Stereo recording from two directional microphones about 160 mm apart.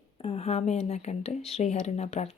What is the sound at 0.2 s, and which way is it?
A woman's voice, 40° left (ahead or behind).